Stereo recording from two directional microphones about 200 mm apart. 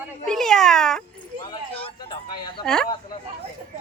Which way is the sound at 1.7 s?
25° left (ahead or behind).